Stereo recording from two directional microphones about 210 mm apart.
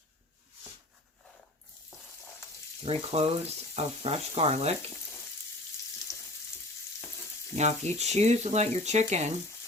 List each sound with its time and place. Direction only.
2.8 s speech: 30° right (ahead or behind)
7.5 s speech: 30° right (ahead or behind)